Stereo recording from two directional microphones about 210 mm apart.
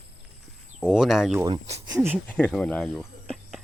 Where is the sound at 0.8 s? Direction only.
Centre (ahead or behind).